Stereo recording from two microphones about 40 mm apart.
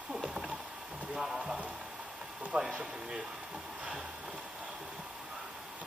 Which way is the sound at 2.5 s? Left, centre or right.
Centre.